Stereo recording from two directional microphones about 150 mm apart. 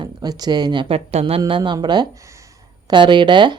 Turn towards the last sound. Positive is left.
turn(degrees=-30)  # may be behind; listen again after turning